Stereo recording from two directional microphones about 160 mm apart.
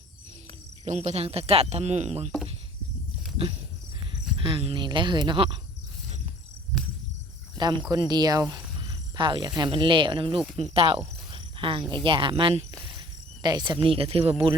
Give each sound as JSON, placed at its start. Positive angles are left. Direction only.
{"t": 0.9, "sound": "speech", "side_deg": -40}
{"t": 4.1, "sound": "speech", "side_deg": -35}
{"t": 7.6, "sound": "speech", "side_deg": -25}